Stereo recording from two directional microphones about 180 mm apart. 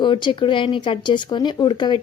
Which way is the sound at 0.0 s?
25° left (ahead or behind).